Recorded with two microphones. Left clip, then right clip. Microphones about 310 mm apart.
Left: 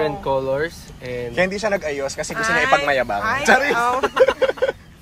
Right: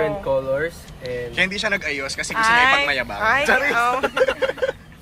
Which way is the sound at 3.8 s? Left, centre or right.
Centre.